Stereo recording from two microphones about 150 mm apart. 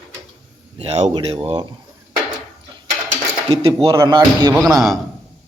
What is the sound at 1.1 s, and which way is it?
Speech, 30° right (ahead or behind).